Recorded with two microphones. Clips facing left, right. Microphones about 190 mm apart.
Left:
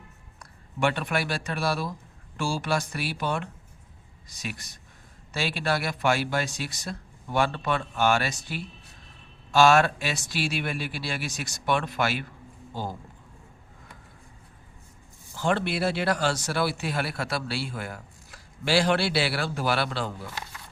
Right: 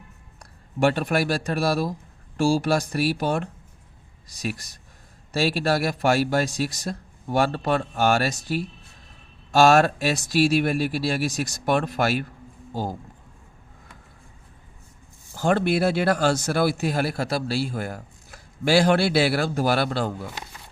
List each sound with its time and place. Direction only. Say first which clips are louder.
0.3 s a man's voice: right 6 dB; 40° right (ahead or behind)
15.4 s speech: right 5 dB; 45° right (ahead or behind)